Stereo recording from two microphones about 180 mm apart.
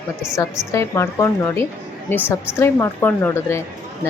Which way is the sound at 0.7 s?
15° left (ahead or behind).